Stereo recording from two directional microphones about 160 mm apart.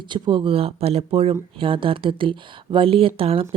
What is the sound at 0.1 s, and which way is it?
Speech, 30° right (ahead or behind).